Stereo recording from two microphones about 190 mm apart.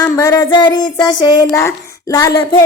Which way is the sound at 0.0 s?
20° left (ahead or behind).